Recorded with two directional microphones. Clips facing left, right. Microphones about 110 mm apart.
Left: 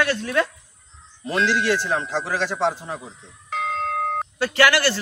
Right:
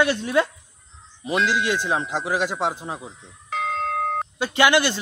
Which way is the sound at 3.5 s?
Centre (ahead or behind).